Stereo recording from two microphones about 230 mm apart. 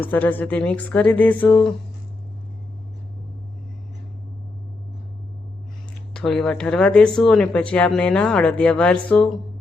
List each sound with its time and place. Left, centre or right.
0.0 s speech: centre
6.1 s speech: centre